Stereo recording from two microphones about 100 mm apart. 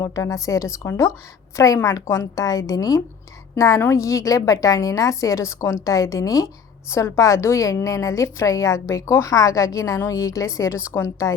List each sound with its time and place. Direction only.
0.0 s a woman's voice: 30° left (ahead or behind)